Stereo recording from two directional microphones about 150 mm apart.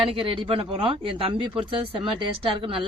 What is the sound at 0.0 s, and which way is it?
Speech, 35° right (ahead or behind).